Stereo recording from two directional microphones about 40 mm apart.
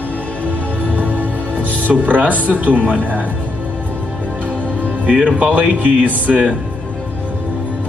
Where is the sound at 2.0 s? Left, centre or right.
Right.